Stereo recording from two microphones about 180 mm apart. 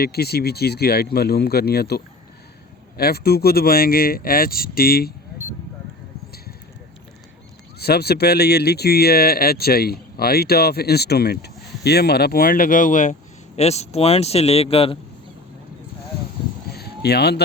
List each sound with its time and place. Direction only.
0.0 s speech: 60° left (ahead or behind)
3.0 s speech: 60° left (ahead or behind)
7.8 s speech: 60° left (ahead or behind); by 14.9 s 30° left (ahead or behind)
16.7 s a sound: 60° left (ahead or behind)